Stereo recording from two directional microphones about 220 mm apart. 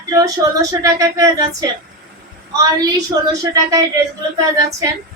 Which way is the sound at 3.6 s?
15° right (ahead or behind).